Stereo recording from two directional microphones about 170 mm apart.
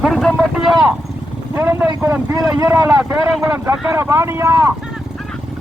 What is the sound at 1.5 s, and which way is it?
Speech, 10° right (ahead or behind).